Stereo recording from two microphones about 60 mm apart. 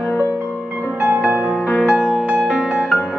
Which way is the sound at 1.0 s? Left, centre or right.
Right.